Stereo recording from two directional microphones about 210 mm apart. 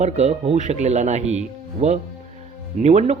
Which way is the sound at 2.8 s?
30° right (ahead or behind).